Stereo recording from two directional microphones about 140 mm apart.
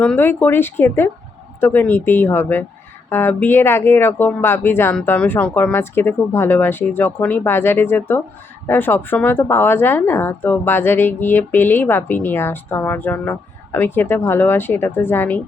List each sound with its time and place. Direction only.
0.0 s speech: 10° left (ahead or behind)